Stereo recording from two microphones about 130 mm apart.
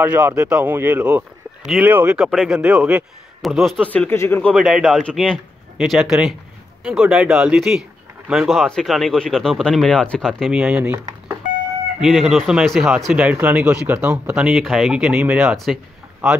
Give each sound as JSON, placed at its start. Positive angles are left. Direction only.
{"t": 0.0, "sound": "speech", "side_deg": -10}
{"t": 3.4, "sound": "speech", "side_deg": 0}
{"t": 4.6, "sound": "speech", "side_deg": -5}
{"t": 12.0, "sound": "speech", "side_deg": 0}